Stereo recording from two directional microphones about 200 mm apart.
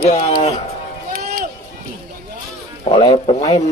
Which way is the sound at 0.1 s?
35° left (ahead or behind).